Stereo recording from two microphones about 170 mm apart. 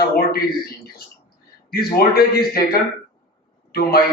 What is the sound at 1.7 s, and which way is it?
A man's voice, 65° left (ahead or behind).